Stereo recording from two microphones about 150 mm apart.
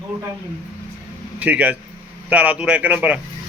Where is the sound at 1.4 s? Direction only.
10° right (ahead or behind).